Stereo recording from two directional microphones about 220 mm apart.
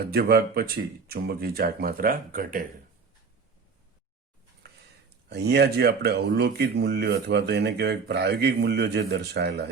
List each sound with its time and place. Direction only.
0.0 s speech: 45° right (ahead or behind)
5.0 s speech: 50° right (ahead or behind)